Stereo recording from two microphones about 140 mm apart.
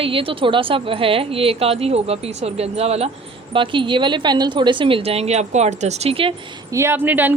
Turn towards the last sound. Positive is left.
turn(degrees=-15)  # may be behind; listen again after turning